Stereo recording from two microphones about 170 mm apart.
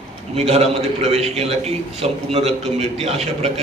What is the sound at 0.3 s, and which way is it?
A man's voice, 40° right (ahead or behind).